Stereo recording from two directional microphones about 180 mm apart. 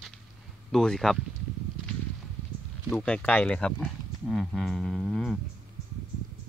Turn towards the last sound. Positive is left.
turn(degrees=0)  # may be behind; listen again after turning